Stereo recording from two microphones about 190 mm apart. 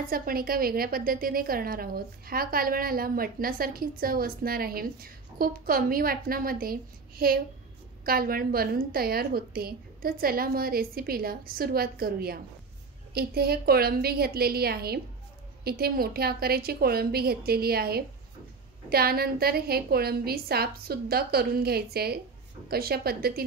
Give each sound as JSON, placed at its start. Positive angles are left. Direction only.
{"t": 0.0, "sound": "a woman's voice", "side_deg": -50}